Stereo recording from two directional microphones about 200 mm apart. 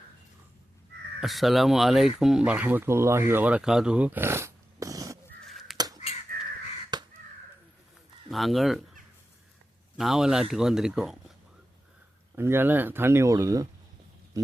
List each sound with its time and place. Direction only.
1.2 s speech: centre (ahead or behind); by 5.1 s 15° right (ahead or behind)
5.5 s crow: centre (ahead or behind)
5.7 s crow: 20° right (ahead or behind)
6.3 s crow: 45° right (ahead or behind)
6.9 s crow: 20° right (ahead or behind)
8.3 s speech: centre (ahead or behind)
10.0 s speech: centre (ahead or behind)
12.4 s speech: 10° right (ahead or behind)